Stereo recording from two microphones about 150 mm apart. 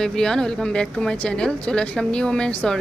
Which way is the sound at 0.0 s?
5° left (ahead or behind).